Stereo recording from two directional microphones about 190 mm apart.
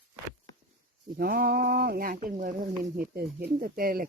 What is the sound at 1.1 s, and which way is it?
Speech, 50° right (ahead or behind).